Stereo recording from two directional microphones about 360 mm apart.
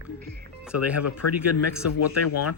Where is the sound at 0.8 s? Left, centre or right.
Left.